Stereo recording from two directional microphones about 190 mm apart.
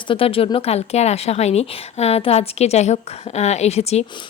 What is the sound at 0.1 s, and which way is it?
A woman's voice, 30° left (ahead or behind).